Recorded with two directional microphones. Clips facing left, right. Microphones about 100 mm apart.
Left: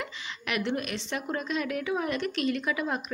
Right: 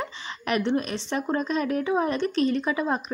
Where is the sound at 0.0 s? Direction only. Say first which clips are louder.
Right 5 dB; 35° right (ahead or behind).